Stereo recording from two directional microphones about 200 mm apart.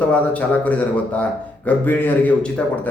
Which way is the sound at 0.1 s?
5° left (ahead or behind).